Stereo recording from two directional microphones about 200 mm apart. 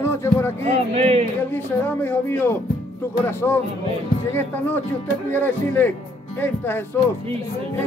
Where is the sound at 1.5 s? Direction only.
10° left (ahead or behind).